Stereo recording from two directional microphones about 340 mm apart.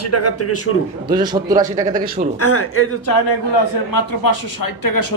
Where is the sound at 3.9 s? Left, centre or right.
Left.